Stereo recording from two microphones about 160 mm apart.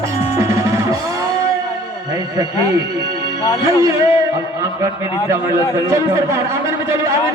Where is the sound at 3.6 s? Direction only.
20° right (ahead or behind).